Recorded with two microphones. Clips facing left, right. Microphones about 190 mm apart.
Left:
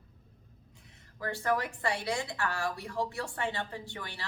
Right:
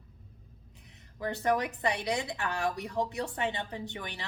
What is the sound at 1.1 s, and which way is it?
A woman's voice, 20° right (ahead or behind).